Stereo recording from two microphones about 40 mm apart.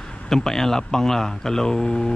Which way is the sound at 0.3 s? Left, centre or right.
Centre.